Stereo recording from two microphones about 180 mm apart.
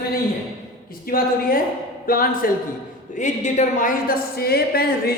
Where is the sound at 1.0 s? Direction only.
55° left (ahead or behind).